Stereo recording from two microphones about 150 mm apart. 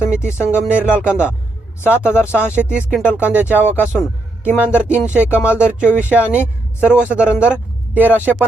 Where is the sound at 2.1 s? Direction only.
15° left (ahead or behind).